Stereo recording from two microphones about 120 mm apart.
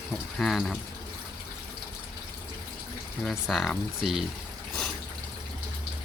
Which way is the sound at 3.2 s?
Centre (ahead or behind).